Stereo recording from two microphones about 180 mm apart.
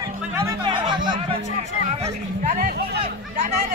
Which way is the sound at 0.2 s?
15° right (ahead or behind).